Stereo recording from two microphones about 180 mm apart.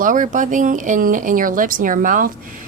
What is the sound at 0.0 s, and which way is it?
Speech, 45° right (ahead or behind).